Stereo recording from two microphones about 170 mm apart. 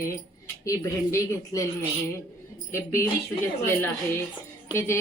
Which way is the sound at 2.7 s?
15° left (ahead or behind).